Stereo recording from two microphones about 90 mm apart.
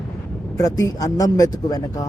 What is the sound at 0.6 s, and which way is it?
Speech, 40° left (ahead or behind).